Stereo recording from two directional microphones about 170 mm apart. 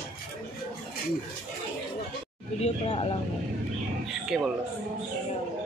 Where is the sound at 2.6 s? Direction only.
35° left (ahead or behind).